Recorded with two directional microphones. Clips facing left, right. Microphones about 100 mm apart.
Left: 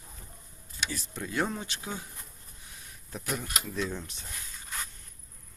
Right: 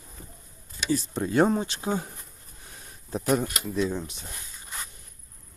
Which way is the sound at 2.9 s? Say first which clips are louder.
Right 10 dB; 30° right (ahead or behind).